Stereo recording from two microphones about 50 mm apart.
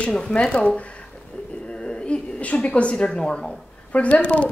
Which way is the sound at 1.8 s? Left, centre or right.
Left.